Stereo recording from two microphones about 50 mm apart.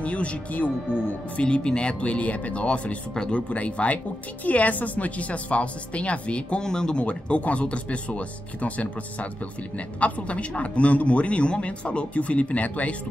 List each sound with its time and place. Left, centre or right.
0.0 s speech: left
6.6 s speech: centre; by 12.9 s left